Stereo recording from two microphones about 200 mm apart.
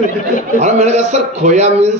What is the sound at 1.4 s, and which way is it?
Speech, 35° right (ahead or behind).